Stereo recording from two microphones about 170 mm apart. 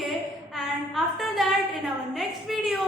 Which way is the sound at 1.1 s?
Centre (ahead or behind).